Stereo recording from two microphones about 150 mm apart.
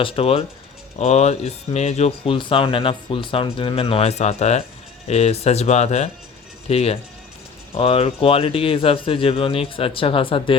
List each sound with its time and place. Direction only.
0.0 s speech: 40° left (ahead or behind)